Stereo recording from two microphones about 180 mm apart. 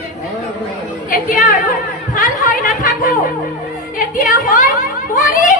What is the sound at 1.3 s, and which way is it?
Speech, 45° left (ahead or behind).